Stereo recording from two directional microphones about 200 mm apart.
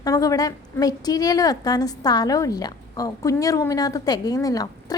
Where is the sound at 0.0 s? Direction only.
15° left (ahead or behind).